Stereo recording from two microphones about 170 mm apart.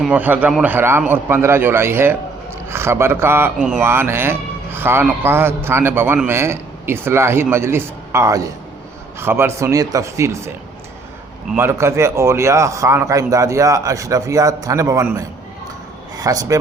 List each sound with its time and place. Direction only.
0.0 s a man's voice: 10° right (ahead or behind)
11.5 s a man's voice: 15° right (ahead or behind)